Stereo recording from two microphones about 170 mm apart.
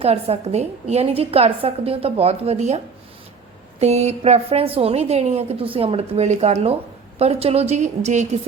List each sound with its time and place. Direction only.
0.0 s a woman's voice: 35° right (ahead or behind)